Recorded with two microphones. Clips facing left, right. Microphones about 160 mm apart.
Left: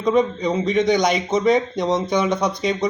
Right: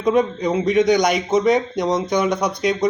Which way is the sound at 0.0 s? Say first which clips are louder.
Right 1 dB; 5° right (ahead or behind).